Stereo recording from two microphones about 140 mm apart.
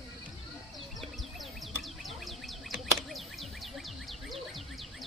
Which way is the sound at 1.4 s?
Centre (ahead or behind).